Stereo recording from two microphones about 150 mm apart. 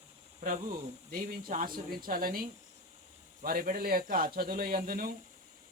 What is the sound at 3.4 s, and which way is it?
Speech, 75° right (ahead or behind).